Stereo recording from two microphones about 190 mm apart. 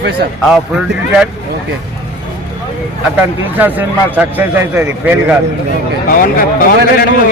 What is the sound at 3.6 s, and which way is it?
A man's voice, 10° right (ahead or behind).